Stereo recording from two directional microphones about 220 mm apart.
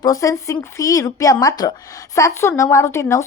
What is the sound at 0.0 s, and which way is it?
A woman's voice, 15° left (ahead or behind).